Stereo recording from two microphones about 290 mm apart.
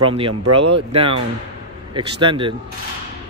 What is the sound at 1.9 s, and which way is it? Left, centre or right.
Speech, centre.